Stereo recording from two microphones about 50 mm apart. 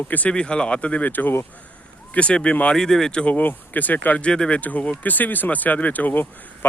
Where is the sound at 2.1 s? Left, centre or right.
Left.